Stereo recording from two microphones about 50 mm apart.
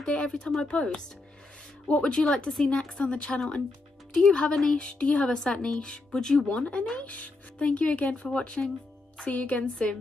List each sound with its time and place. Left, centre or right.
0.0 s speech: centre
6.5 s speech: left